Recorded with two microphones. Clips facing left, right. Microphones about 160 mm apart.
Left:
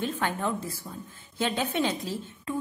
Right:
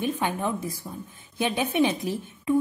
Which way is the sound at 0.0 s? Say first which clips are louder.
Right 2 dB; 15° right (ahead or behind).